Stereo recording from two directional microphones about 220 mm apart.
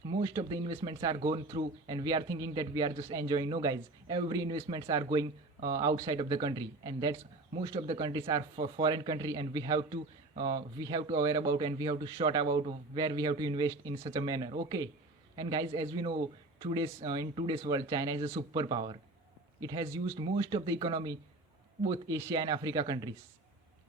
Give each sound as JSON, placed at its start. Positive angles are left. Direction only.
{"t": 0.2, "sound": "speech", "side_deg": -20}